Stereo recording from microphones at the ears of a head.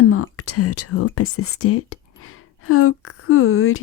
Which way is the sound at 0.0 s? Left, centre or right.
Left.